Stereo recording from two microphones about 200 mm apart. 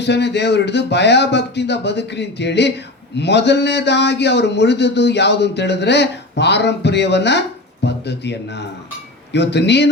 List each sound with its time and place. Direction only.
0.0 s a man's voice: 60° left (ahead or behind)